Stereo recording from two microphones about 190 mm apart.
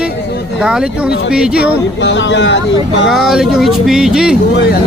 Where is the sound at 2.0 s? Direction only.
70° left (ahead or behind).